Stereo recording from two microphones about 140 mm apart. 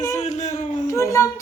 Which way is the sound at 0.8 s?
20° left (ahead or behind).